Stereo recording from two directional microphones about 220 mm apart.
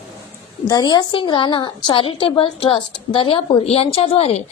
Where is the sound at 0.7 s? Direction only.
20° left (ahead or behind).